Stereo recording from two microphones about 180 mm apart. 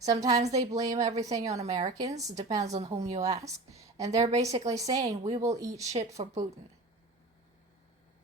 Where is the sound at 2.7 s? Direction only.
35° right (ahead or behind).